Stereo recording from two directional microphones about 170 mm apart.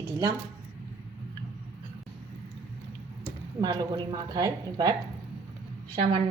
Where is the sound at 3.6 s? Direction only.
25° right (ahead or behind).